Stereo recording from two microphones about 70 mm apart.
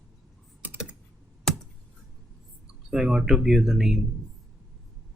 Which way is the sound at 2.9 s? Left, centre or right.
Centre.